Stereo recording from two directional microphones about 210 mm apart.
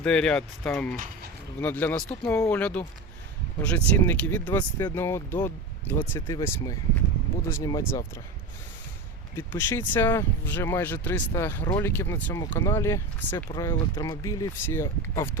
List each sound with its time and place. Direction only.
0.0 s speech: 5° left (ahead or behind)
9.3 s speech: 10° left (ahead or behind)